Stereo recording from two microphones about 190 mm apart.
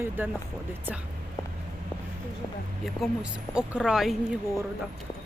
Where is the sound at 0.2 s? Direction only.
10° right (ahead or behind).